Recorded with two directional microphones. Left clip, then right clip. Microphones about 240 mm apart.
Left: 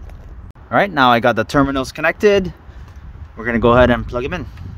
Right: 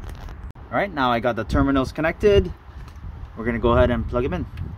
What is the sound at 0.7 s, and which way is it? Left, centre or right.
Speech, left.